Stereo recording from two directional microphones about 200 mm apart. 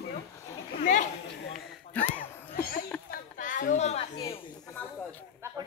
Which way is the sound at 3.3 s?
40° left (ahead or behind).